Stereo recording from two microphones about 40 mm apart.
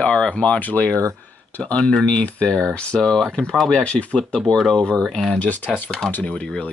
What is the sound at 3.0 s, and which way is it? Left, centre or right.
Speech, centre.